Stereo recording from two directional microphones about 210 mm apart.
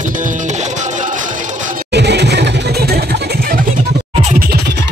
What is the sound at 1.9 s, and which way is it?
Vehicle, 55° right (ahead or behind).